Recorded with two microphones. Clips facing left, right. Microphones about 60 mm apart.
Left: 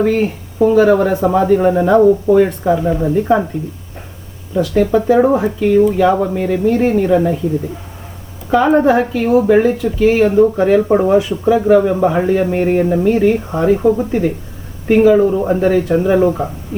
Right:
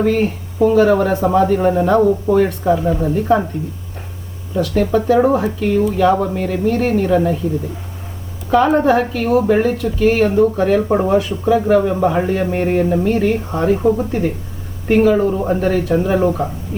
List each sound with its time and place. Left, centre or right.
0.0 s speech: centre
1.7 s speech: centre
2.0 s speech: centre
4.8 s speech: centre
8.4 s speech: centre
10.6 s speech: centre
10.8 s speech: centre
13.7 s speech: centre
15.2 s speech: centre
15.4 s speech: centre